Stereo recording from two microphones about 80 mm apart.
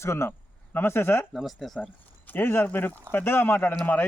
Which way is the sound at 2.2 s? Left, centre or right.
Left.